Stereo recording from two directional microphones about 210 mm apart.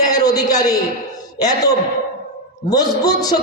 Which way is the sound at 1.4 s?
20° left (ahead or behind).